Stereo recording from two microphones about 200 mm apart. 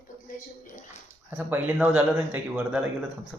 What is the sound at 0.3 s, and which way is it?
Speech, 40° left (ahead or behind).